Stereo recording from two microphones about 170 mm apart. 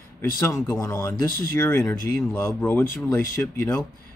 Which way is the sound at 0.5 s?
15° left (ahead or behind).